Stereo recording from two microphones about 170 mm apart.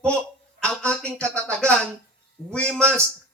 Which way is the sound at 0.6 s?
5° left (ahead or behind).